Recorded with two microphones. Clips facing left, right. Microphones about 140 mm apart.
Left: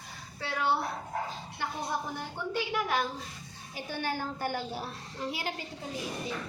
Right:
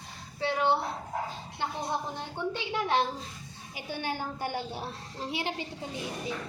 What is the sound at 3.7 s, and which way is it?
A woman's voice, 15° right (ahead or behind).